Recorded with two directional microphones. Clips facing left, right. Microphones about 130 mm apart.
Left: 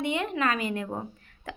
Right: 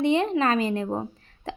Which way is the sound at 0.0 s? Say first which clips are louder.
Right 6 dB; 30° right (ahead or behind).